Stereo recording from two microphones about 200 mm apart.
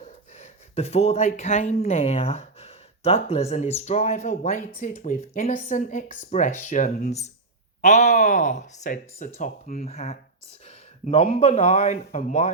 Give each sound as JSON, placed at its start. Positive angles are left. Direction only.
{"t": 0.0, "sound": "speech", "side_deg": 35}